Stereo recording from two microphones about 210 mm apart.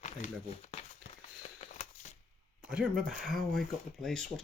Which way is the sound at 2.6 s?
5° right (ahead or behind).